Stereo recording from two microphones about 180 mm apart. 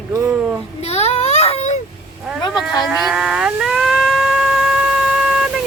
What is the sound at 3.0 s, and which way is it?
Music, 5° right (ahead or behind).